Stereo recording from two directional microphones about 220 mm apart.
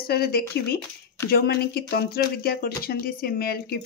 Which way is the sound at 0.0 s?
45° left (ahead or behind).